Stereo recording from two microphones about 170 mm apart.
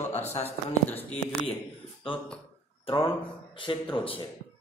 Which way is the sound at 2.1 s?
30° left (ahead or behind).